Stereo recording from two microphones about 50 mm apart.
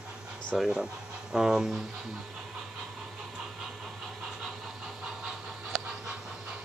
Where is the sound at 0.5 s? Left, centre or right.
Centre.